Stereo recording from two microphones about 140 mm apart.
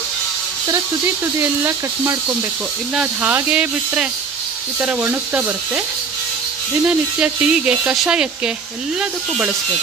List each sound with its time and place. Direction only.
1.4 s speech: 20° right (ahead or behind)
6.8 s speech: 10° right (ahead or behind)